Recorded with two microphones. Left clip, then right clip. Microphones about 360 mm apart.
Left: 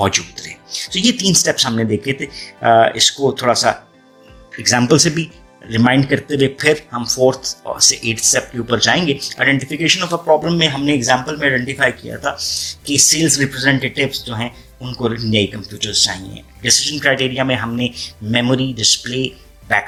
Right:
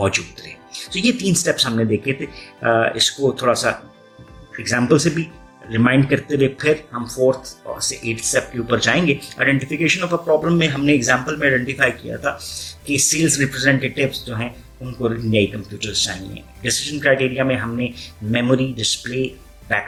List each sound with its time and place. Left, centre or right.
0.0 s speech: centre